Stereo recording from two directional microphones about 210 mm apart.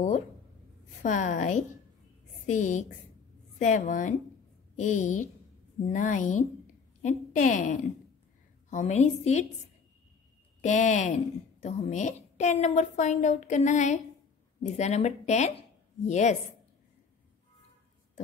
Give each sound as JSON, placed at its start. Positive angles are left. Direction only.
{"t": 1.0, "sound": "a woman's voice", "side_deg": 35}
{"t": 10.6, "sound": "a woman's voice", "side_deg": 35}